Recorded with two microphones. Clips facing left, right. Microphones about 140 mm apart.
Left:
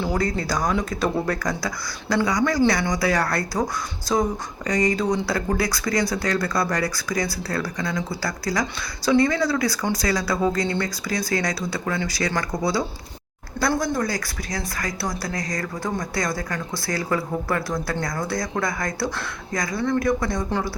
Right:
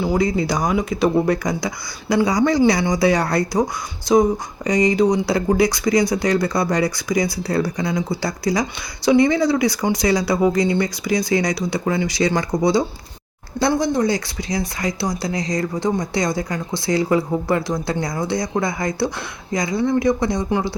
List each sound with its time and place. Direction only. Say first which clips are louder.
0.0 s speech: right 5 dB; 10° right (ahead or behind)